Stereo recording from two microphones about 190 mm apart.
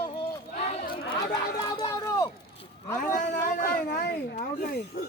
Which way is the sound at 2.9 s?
45° left (ahead or behind).